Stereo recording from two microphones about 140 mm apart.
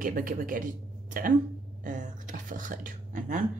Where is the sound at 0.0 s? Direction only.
75° right (ahead or behind).